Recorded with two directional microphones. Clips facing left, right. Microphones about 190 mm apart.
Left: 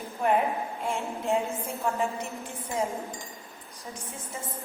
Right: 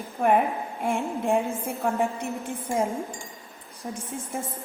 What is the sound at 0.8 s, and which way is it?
A woman's voice, 55° right (ahead or behind).